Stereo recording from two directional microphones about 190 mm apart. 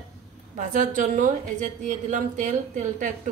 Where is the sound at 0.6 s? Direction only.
45° right (ahead or behind).